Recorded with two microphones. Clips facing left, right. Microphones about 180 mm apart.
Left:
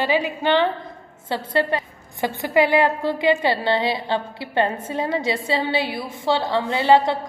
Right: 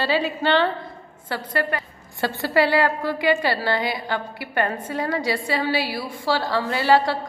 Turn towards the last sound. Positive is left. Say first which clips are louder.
# left 2 dB
turn(degrees=20)  # may be behind; listen again after turning